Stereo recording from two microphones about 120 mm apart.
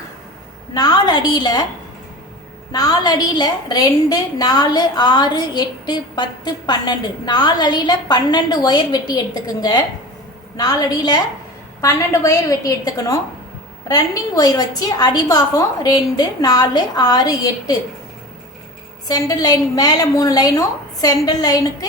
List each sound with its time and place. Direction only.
0.7 s a woman's voice: 35° left (ahead or behind)
2.7 s a woman's voice: 30° left (ahead or behind)
19.0 s a woman's voice: 30° left (ahead or behind)